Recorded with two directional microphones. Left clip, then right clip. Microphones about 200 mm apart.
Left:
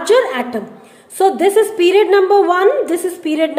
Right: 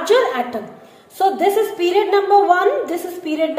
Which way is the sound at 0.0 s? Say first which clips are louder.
Left 2 dB; 30° left (ahead or behind).